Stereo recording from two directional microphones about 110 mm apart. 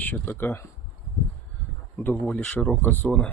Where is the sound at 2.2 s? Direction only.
10° left (ahead or behind).